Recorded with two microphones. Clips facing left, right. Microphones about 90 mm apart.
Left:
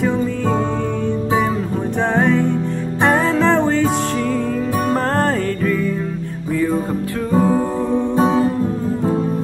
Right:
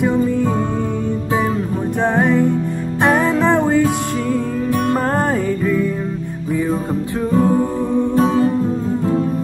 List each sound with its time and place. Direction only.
2.1 s music: 15° right (ahead or behind)
7.3 s music: 15° left (ahead or behind)